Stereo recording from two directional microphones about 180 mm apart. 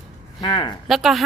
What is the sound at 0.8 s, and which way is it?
Speech, centre (ahead or behind).